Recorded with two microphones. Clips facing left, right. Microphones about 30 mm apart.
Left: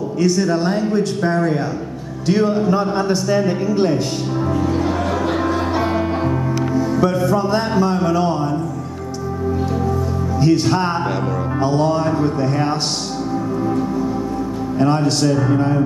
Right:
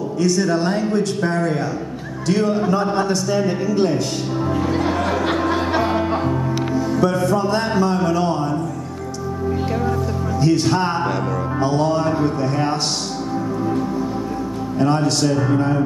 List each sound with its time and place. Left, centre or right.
0.2 s a man's voice: centre
4.5 s music: right
5.8 s music: centre
10.4 s a man's voice: centre
14.8 s a man's voice: centre